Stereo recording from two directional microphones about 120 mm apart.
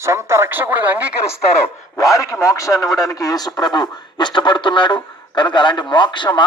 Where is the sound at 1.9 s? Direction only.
25° left (ahead or behind).